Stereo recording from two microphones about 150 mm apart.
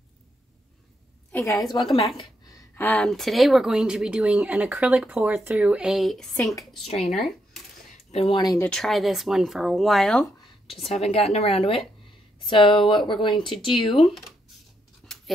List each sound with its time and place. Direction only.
1.3 s a woman's voice: 20° left (ahead or behind)
2.0 s a sound: 30° left (ahead or behind)
2.7 s speech: 10° left (ahead or behind)
8.1 s speech: 45° left (ahead or behind)
8.5 s speech: 5° left (ahead or behind)
10.7 s speech: 45° left (ahead or behind)